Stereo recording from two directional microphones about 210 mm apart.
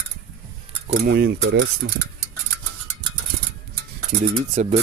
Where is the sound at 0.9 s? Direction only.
50° right (ahead or behind).